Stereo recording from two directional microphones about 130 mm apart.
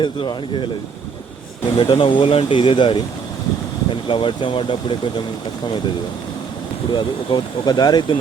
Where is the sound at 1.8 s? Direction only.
40° left (ahead or behind).